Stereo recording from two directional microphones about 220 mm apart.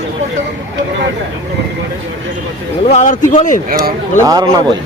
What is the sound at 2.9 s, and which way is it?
Speech, 35° left (ahead or behind).